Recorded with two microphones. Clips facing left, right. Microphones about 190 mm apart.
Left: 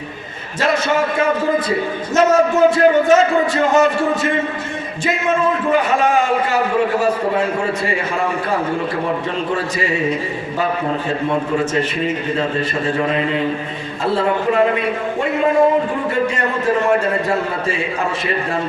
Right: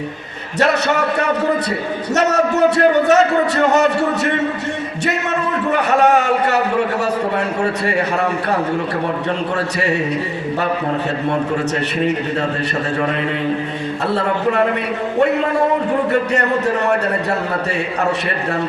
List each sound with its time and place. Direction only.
0.6 s a man's voice: 70° right (ahead or behind)
9.8 s a man's voice: 70° right (ahead or behind)
16.3 s a man's voice: 70° right (ahead or behind)